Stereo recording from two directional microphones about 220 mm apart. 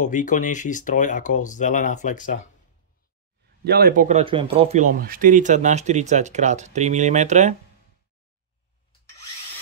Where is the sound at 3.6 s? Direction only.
45° right (ahead or behind).